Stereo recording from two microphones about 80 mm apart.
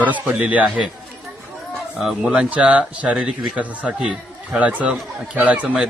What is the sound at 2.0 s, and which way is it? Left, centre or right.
Speech, centre.